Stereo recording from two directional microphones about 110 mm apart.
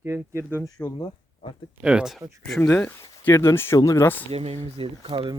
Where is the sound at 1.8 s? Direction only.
5° right (ahead or behind).